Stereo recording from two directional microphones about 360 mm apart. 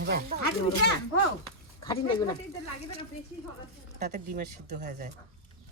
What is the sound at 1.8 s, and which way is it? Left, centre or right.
Speech, centre.